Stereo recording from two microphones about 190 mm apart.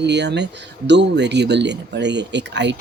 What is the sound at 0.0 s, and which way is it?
Speech, 65° right (ahead or behind).